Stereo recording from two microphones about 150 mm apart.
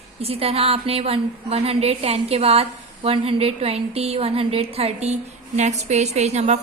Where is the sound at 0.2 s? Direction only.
40° right (ahead or behind).